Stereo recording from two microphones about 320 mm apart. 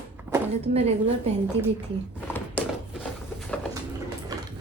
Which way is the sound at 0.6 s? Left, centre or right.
Centre.